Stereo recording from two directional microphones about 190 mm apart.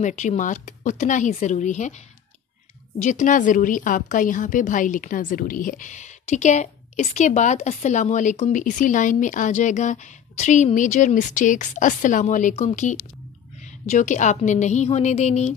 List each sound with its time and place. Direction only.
0.0 s a woman's voice: 40° left (ahead or behind)
3.0 s a woman's voice: 40° left (ahead or behind)